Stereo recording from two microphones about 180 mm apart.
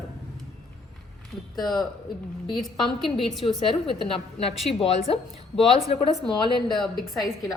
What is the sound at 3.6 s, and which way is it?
A woman's voice, 30° left (ahead or behind).